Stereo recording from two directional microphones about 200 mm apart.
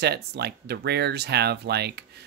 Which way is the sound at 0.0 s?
55° right (ahead or behind).